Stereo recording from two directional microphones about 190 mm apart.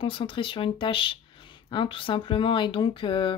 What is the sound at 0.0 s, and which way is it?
Speech, 25° left (ahead or behind).